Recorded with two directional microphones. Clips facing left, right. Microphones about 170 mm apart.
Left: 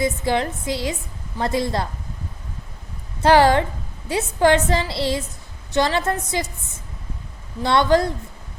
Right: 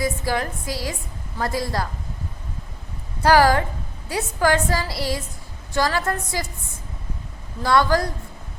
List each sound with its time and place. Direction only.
0.0 s a woman's voice: 25° left (ahead or behind)
3.2 s a woman's voice: 25° left (ahead or behind)
7.6 s a woman's voice: 25° left (ahead or behind)